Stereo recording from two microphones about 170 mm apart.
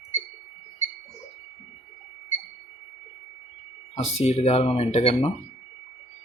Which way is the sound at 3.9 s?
40° left (ahead or behind).